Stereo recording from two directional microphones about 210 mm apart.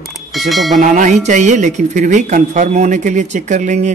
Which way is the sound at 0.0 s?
Centre (ahead or behind).